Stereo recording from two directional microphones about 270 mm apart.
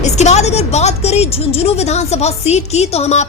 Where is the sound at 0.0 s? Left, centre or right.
Left.